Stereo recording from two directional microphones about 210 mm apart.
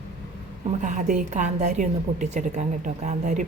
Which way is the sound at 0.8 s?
35° right (ahead or behind).